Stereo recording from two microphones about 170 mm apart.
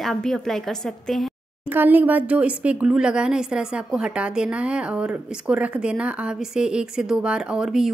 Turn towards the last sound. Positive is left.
turn(degrees=-5)  # may be behind; listen again after turning